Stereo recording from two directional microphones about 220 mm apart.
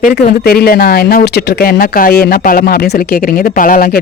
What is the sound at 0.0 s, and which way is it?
A woman's voice, 40° left (ahead or behind).